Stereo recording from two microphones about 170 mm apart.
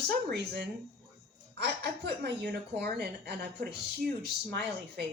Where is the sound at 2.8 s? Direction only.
70° right (ahead or behind).